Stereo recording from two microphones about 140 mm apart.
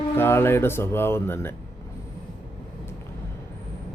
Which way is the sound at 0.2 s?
15° left (ahead or behind).